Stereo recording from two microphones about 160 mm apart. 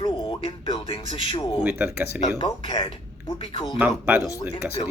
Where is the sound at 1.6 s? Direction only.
10° right (ahead or behind).